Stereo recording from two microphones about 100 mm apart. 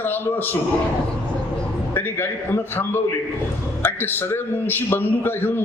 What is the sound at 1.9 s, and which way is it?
A man's voice, 20° left (ahead or behind).